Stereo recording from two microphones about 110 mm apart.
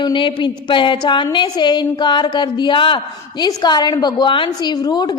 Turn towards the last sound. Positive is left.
turn(degrees=40)  # may be behind; listen again after turning